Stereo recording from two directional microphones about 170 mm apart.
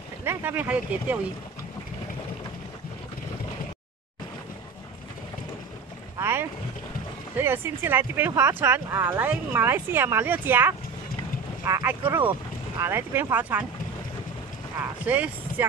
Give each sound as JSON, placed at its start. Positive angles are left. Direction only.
{"t": 0.2, "sound": "speech", "side_deg": -15}
{"t": 6.1, "sound": "boat", "side_deg": -15}
{"t": 7.3, "sound": "speech", "side_deg": -15}
{"t": 15.0, "sound": "speech", "side_deg": -10}